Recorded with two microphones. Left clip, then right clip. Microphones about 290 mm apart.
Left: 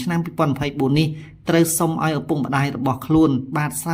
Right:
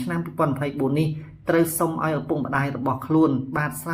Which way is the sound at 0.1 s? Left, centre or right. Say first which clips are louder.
Left 3 dB; left.